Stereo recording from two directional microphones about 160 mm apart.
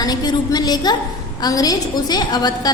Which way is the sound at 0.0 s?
25° left (ahead or behind).